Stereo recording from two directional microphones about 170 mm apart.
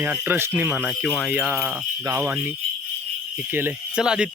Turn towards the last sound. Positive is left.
turn(degrees=-5)  # may be behind; listen again after turning